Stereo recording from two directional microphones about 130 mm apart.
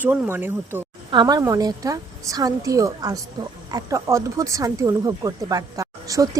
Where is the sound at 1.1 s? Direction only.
35° right (ahead or behind).